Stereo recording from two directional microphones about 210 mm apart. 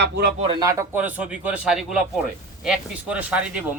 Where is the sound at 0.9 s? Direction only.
5° right (ahead or behind).